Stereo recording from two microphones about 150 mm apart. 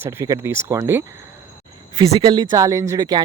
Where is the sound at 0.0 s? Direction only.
15° right (ahead or behind).